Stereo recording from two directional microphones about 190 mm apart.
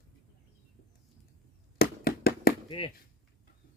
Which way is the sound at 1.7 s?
55° left (ahead or behind).